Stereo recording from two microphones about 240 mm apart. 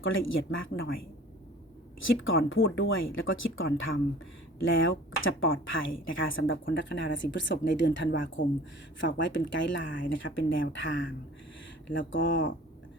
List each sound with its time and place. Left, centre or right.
0.0 s a woman's voice: left